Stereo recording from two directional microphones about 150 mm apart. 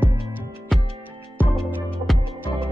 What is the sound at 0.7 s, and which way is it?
Music, centre (ahead or behind).